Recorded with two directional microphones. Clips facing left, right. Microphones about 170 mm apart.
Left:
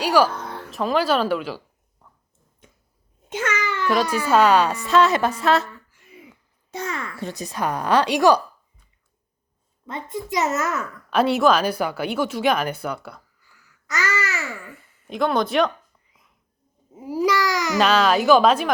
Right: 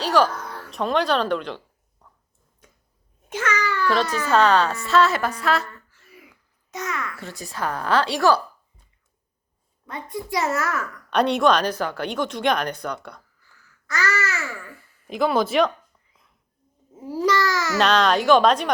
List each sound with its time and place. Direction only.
0.0 s music: 10° left (ahead or behind)
0.3 s music: 25° left (ahead or behind)
0.7 s a woman's voice: centre (ahead or behind)
3.2 s a child's voice: 25° left (ahead or behind)
5.6 s babbling: 15° left (ahead or behind)
7.3 s a woman's voice: 20° left (ahead or behind)
9.8 s a child's voice: 20° left (ahead or behind)
11.1 s speech: 5° left (ahead or behind)
13.8 s a child's voice: 20° left (ahead or behind)
15.0 s speech: centre (ahead or behind)
16.9 s a woman's voice: 10° left (ahead or behind)
17.7 s speech: 5° left (ahead or behind)